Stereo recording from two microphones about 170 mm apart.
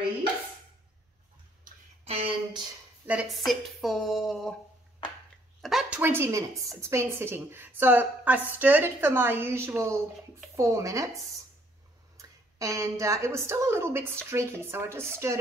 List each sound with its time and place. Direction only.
2.0 s a sound: 35° right (ahead or behind)
3.1 s speech: 5° right (ahead or behind)
5.6 s a woman's voice: centre (ahead or behind); by 11.1 s 20° right (ahead or behind)
12.2 s a woman's voice: 20° right (ahead or behind)